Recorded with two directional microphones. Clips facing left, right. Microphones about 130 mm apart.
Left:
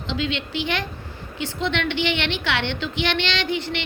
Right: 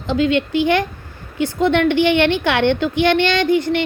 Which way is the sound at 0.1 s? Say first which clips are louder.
Right 10 dB; 50° right (ahead or behind).